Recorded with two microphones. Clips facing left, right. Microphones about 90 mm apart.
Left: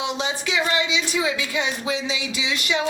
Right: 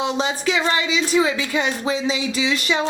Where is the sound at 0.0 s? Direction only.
40° right (ahead or behind).